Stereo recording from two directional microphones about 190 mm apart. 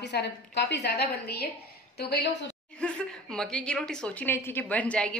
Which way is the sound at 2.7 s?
5° left (ahead or behind).